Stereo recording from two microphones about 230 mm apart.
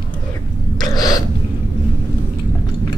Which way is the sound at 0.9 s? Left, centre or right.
Centre.